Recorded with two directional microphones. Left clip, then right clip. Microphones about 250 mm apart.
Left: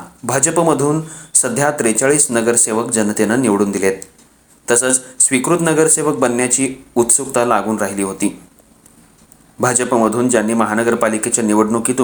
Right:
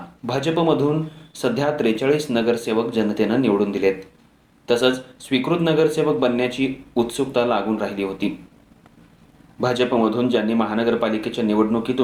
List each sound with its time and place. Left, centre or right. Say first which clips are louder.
0.3 s speech: left 5 dB; left
9.9 s speech: left 5 dB; left